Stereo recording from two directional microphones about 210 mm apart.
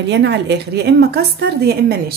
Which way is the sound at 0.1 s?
55° right (ahead or behind).